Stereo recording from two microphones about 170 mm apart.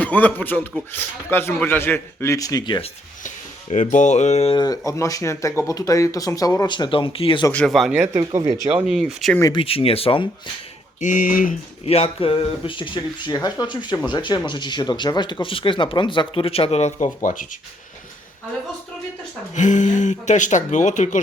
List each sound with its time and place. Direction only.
0.0 s a man's voice: 10° left (ahead or behind); by 2.9 s 25° left (ahead or behind)
3.2 s speech: 45° left (ahead or behind)
4.5 s speech: 25° left (ahead or behind)
7.5 s speech: 5° left (ahead or behind)
8.1 s speech: 20° right (ahead or behind)
8.9 s speech: 5° right (ahead or behind)
9.5 s speech: 30° left (ahead or behind)
11.0 s speech: 50° left (ahead or behind)
11.9 s speech: 35° left (ahead or behind)
19.5 s speech: 45° left (ahead or behind)